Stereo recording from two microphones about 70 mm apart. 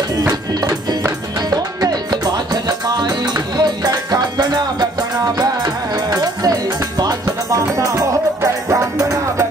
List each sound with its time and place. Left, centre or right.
0.3 s music: right
1.5 s music: right
7.2 s music: right